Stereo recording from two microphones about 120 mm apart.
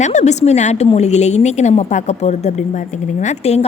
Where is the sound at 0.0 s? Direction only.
80° left.